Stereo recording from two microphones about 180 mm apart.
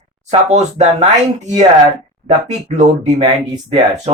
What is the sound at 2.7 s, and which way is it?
Speech, 35° right (ahead or behind).